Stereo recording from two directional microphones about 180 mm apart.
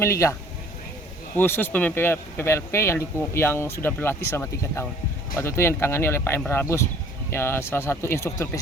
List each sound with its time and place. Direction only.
0.0 s speech: 15° left (ahead or behind)
1.4 s speech: 10° left (ahead or behind)